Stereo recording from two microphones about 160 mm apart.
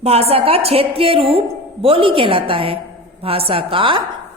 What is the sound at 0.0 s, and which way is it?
A woman's voice, 40° right (ahead or behind).